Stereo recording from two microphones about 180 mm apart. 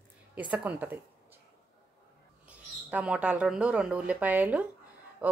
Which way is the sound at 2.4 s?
5° right (ahead or behind).